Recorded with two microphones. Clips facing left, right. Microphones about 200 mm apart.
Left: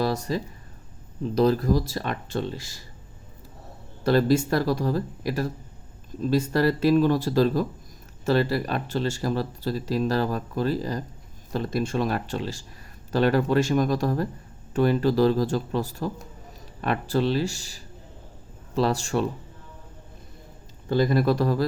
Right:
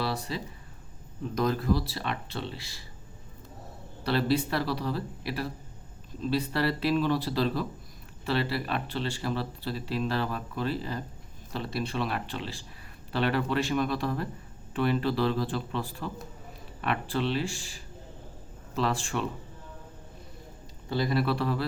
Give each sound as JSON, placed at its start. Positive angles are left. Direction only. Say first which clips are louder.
{"t": 0.0, "sound": "speech", "louder": "left 6 dB", "side_deg": 45}
{"t": 1.2, "sound": "speech", "louder": "left 7 dB", "side_deg": 35}
{"t": 4.0, "sound": "speech", "louder": "left 6 dB", "side_deg": 45}
{"t": 20.9, "sound": "speech", "louder": "left 6 dB", "side_deg": 45}